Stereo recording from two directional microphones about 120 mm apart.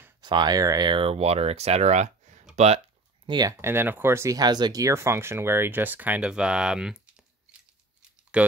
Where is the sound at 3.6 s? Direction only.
20° right (ahead or behind).